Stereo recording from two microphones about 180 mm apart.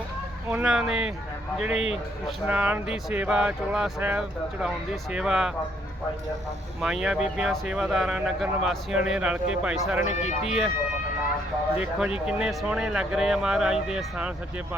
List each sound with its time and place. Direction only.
0.5 s speech: 5° right (ahead or behind)
6.8 s speech: 5° right (ahead or behind)
10.0 s speech: 40° left (ahead or behind)
10.4 s speech: 5° right (ahead or behind)
11.8 s speech: 5° right (ahead or behind)